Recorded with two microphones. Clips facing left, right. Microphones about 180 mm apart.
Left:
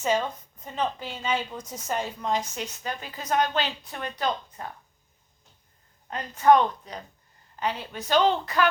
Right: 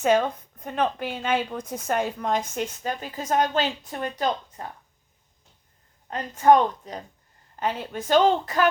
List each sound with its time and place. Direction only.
0.0 s a woman's voice: 55° right (ahead or behind)
6.1 s a woman's voice: 40° right (ahead or behind)